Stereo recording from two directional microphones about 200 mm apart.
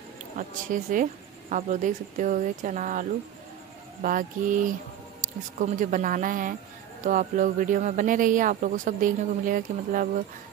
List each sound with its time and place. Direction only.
0.4 s speech: 40° right (ahead or behind)